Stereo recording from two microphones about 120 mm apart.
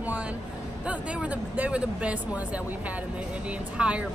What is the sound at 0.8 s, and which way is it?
A woman's voice, 10° right (ahead or behind).